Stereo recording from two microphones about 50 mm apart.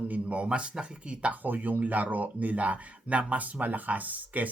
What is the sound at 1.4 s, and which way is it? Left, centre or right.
Speech, right.